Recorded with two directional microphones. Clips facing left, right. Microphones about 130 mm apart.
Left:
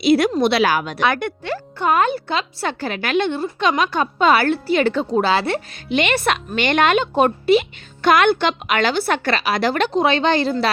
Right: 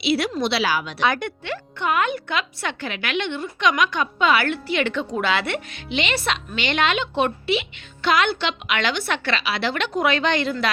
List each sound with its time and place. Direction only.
0.0 s a woman's voice: 45° left (ahead or behind)
1.5 s speech: 40° left (ahead or behind)
6.0 s a woman's voice: 55° left (ahead or behind)
9.9 s a woman's voice: 30° left (ahead or behind)